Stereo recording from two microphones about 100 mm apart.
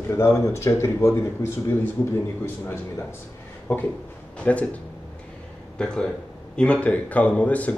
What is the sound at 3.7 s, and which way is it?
Speech, 20° left (ahead or behind).